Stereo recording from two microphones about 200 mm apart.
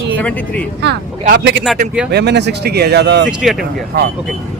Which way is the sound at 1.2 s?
55° right (ahead or behind).